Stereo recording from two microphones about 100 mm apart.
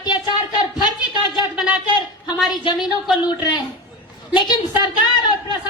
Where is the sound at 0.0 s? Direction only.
45° left (ahead or behind).